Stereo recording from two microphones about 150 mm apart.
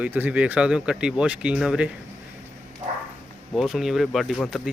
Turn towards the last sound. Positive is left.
turn(degrees=0)  # may be behind; listen again after turning